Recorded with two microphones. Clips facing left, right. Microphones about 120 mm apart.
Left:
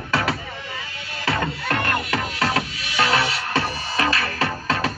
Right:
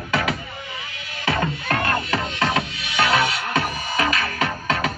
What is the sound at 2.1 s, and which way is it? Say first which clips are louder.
Music: right 1 dB; 25° right (ahead or behind).